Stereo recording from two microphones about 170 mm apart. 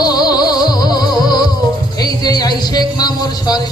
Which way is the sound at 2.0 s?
25° left (ahead or behind).